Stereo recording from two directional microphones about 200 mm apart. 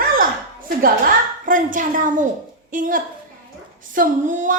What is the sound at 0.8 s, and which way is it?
A woman's voice, 45° right (ahead or behind).